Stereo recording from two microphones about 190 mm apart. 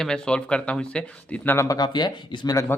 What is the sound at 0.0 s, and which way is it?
Speech, 5° left (ahead or behind).